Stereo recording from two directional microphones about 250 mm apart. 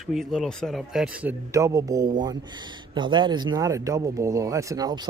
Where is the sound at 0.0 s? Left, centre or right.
Centre.